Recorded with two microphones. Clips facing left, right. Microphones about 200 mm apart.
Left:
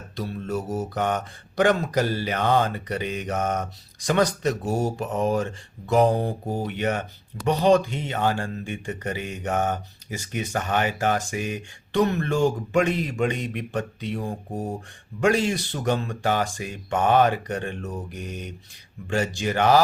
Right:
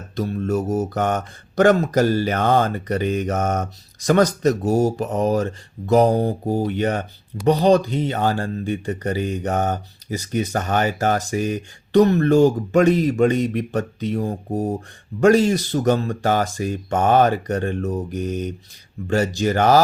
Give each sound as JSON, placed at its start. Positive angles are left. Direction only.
{"t": 0.2, "sound": "speech", "side_deg": -45}